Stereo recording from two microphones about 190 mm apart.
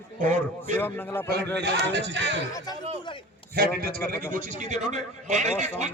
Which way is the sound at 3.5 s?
50° right (ahead or behind).